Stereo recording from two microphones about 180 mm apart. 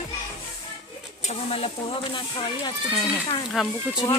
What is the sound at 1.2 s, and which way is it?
Speech, 35° left (ahead or behind).